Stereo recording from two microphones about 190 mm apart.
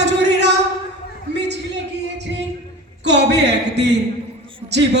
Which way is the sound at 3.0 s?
65° right (ahead or behind).